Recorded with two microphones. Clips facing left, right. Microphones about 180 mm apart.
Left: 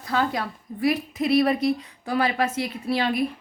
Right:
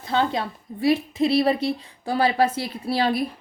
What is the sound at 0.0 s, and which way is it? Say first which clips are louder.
A woman's voice: right 2 dB; 25° right (ahead or behind).